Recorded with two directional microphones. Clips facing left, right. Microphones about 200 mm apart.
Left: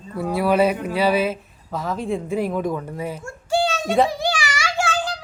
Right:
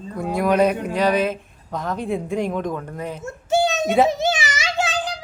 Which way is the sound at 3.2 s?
20° right (ahead or behind).